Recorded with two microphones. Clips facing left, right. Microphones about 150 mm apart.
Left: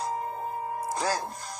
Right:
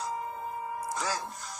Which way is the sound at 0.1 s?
55° left (ahead or behind).